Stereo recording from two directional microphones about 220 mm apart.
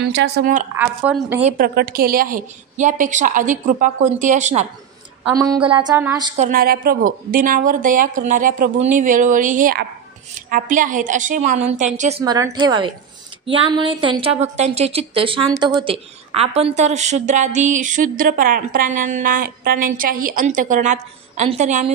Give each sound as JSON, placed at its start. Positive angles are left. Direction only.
{"t": 0.1, "sound": "a woman's voice", "side_deg": -50}
{"t": 0.7, "sound": "a woman's voice", "side_deg": -5}
{"t": 1.4, "sound": "speech", "side_deg": -40}
{"t": 5.3, "sound": "a woman's voice", "side_deg": -15}
{"t": 6.3, "sound": "speech", "side_deg": -35}
{"t": 12.3, "sound": "a woman's voice", "side_deg": -20}